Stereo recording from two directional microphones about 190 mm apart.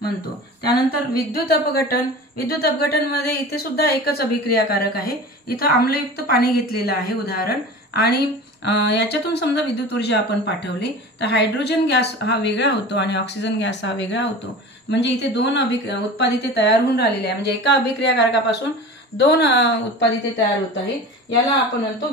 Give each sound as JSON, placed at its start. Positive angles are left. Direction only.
{"t": 0.7, "sound": "a woman's voice", "side_deg": 55}